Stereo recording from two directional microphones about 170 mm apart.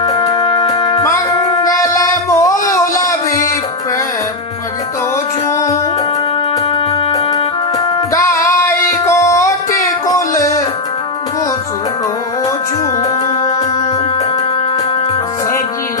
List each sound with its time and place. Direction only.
0.0 s music: 20° left (ahead or behind)
5.5 s music: 20° left (ahead or behind)
8.4 s music: 15° left (ahead or behind)